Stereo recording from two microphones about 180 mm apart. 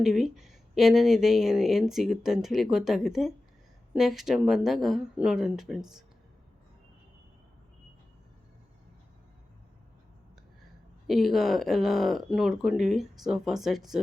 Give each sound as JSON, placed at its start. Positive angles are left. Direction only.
{"t": 0.0, "sound": "speech", "side_deg": 0}
{"t": 11.0, "sound": "speech", "side_deg": 0}